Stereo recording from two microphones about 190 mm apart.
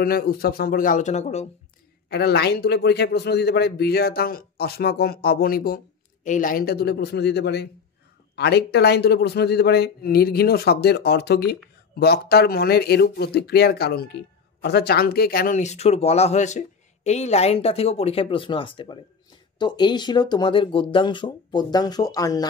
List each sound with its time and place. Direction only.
0.0 s speech: 50° left (ahead or behind); by 1.5 s 35° left (ahead or behind)
2.0 s speech: 55° left (ahead or behind); by 22.5 s 20° left (ahead or behind)